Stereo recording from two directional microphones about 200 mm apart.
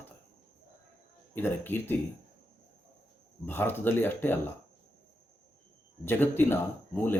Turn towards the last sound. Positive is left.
turn(degrees=10)  # may be behind; listen again after turning